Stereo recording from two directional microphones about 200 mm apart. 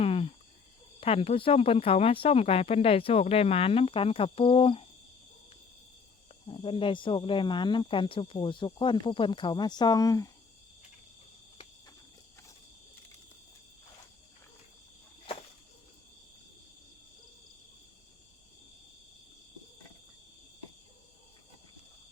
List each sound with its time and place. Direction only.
0.0 s cricket: 30° left (ahead or behind)
0.9 s speech: 30° left (ahead or behind)
6.5 s speech: 25° left (ahead or behind)